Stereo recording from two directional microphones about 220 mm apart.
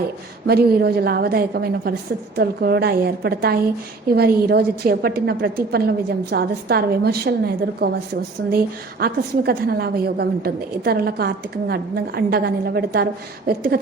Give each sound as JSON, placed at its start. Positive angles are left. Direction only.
{"t": 0.4, "sound": "a woman's voice", "side_deg": -45}